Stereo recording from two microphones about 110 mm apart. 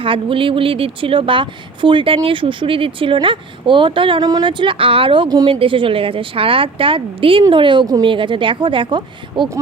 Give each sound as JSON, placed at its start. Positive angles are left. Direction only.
{"t": 0.0, "sound": "a woman's voice", "side_deg": -55}
{"t": 4.2, "sound": "a woman's voice", "side_deg": -35}